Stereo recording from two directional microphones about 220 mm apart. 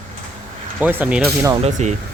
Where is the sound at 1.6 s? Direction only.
30° right (ahead or behind).